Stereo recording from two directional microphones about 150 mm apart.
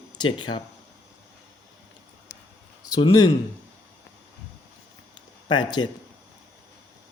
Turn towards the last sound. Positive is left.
turn(degrees=30)  # may be behind; listen again after turning